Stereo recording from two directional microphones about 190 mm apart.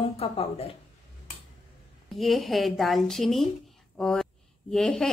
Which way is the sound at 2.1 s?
Centre (ahead or behind).